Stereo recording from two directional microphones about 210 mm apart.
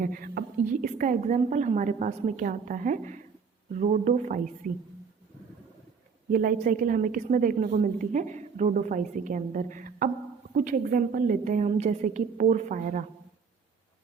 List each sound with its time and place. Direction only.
0.0 s a woman's voice: 45° right (ahead or behind)
6.3 s a woman's voice: 40° right (ahead or behind)